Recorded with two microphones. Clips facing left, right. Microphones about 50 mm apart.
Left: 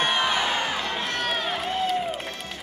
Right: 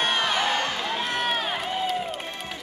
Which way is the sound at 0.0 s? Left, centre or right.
Centre.